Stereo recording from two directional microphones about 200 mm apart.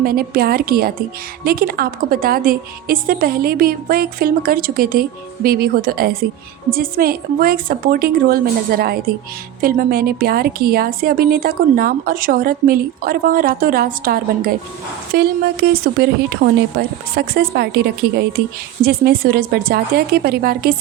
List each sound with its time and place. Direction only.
0.0 s a woman's voice: 50° right (ahead or behind)